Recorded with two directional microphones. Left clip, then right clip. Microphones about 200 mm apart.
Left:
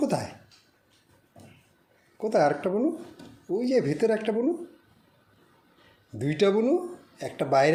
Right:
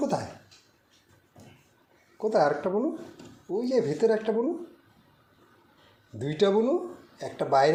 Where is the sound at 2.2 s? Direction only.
30° left (ahead or behind).